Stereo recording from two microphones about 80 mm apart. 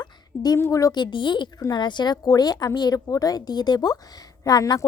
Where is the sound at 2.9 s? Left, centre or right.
Left.